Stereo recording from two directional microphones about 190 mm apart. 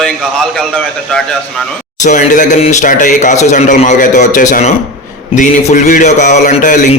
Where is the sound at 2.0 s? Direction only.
40° left (ahead or behind).